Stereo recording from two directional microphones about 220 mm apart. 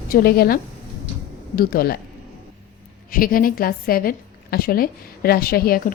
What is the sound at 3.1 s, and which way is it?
A woman's voice, 40° left (ahead or behind).